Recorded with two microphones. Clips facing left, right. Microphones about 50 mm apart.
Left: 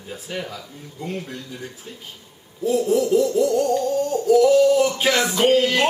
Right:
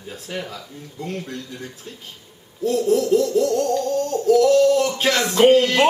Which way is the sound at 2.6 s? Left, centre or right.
Centre.